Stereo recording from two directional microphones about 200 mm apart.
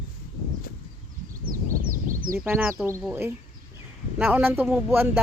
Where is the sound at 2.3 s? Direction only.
10° right (ahead or behind).